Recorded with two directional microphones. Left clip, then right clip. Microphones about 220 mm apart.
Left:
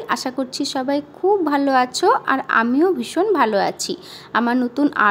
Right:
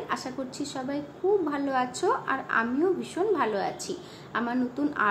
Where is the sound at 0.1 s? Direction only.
50° left (ahead or behind).